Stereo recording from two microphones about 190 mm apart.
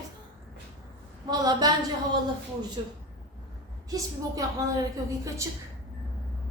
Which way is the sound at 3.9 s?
20° right (ahead or behind).